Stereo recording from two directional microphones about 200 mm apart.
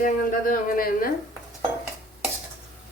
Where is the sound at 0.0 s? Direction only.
40° left (ahead or behind).